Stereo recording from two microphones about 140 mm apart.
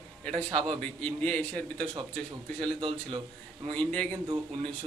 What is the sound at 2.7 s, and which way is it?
Speech, 35° right (ahead or behind).